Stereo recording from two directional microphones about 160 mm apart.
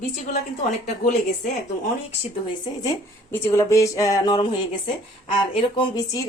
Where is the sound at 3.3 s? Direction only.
20° left (ahead or behind).